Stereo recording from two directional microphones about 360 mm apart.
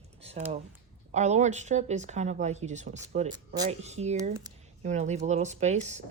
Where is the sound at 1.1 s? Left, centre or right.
Centre.